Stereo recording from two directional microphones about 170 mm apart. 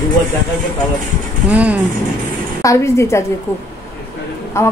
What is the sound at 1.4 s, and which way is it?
Speech, 10° right (ahead or behind).